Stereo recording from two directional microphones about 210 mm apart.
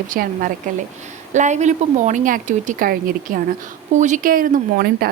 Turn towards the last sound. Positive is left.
turn(degrees=-45)  # may be behind; listen again after turning